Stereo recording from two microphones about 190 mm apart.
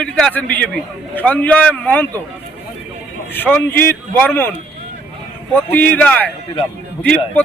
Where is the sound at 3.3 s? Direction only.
10° left (ahead or behind).